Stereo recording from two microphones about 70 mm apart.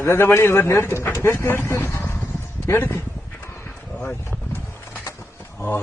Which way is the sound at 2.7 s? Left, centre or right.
Left.